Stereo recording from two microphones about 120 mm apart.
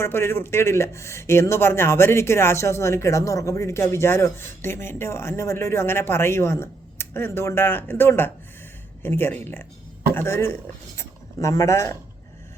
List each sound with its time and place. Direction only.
0.0 s a man's voice: 20° left (ahead or behind)